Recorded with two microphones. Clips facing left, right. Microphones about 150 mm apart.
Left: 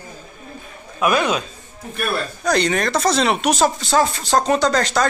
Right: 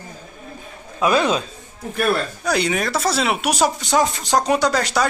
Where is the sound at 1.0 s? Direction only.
25° right (ahead or behind).